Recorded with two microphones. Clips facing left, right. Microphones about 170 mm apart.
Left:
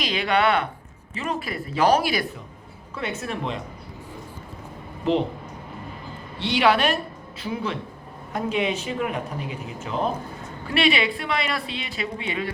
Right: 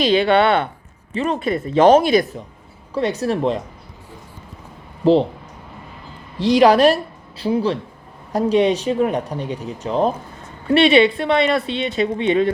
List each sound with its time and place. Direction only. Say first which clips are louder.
0.0 s speech: right 7 dB; 30° right (ahead or behind)
2.9 s speech: right 10 dB; 35° right (ahead or behind)
6.4 s speech: right 8 dB; 40° right (ahead or behind)